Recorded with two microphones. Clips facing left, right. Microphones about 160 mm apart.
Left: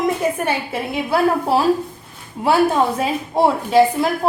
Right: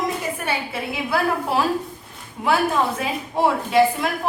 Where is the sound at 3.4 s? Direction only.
35° left (ahead or behind).